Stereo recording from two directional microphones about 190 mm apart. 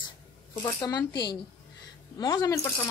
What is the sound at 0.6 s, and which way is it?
A woman's voice, 20° left (ahead or behind).